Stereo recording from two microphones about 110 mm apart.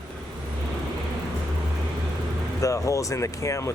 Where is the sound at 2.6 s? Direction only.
30° left (ahead or behind).